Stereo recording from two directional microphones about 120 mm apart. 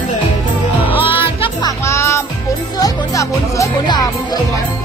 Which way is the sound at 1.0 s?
50° left (ahead or behind).